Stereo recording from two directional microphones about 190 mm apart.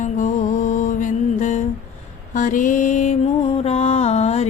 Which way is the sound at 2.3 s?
40° left (ahead or behind).